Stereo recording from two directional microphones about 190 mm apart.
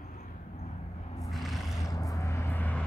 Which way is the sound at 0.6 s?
35° left (ahead or behind).